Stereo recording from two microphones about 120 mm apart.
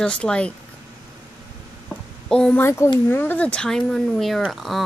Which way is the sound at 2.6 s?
20° left (ahead or behind).